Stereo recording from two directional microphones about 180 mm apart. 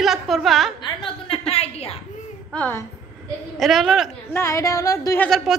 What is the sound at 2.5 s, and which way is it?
A woman's voice, 10° left (ahead or behind).